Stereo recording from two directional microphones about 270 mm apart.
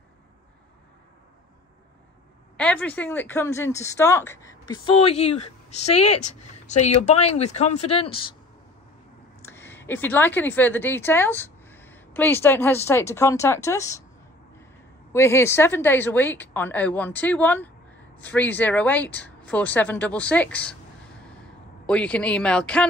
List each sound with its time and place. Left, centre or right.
2.5 s a woman's voice: centre
4.8 s speech: left
9.4 s a woman's voice: centre
15.1 s a woman's voice: centre
21.8 s speech: centre